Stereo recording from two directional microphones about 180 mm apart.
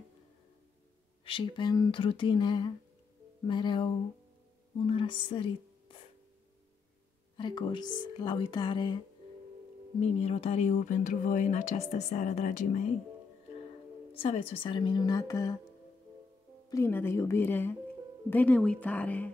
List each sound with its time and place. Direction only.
1.2 s speech: 30° left (ahead or behind)
7.3 s speech: 25° left (ahead or behind); by 12.9 s 40° left (ahead or behind)
14.1 s speech: 30° left (ahead or behind)
16.6 s speech: 15° left (ahead or behind)